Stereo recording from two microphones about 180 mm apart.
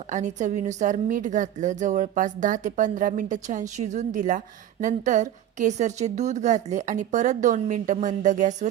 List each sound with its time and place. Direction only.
0.1 s a woman's voice: 40° right (ahead or behind)